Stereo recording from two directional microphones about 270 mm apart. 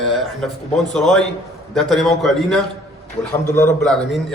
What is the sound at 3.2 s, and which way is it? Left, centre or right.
Speech, centre.